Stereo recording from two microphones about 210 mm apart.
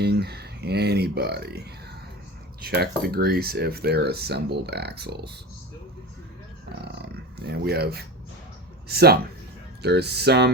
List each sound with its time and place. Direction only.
0.0 s speech: 50° right (ahead or behind)
6.8 s dog: 50° right (ahead or behind)
8.9 s speech: 50° right (ahead or behind)